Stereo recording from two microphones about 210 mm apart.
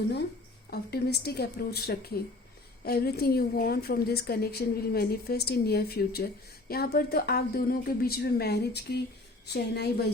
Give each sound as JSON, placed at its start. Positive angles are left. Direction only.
{"t": 0.7, "sound": "a woman's voice", "side_deg": 50}